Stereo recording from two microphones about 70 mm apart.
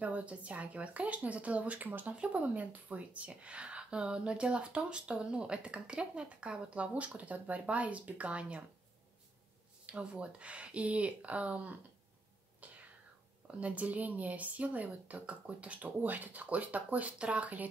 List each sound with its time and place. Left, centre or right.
0.0 s speech: centre
9.8 s speech: centre
12.6 s whispering: right
13.5 s speech: centre